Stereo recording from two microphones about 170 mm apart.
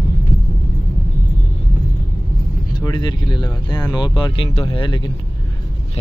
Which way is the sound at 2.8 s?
25° left (ahead or behind).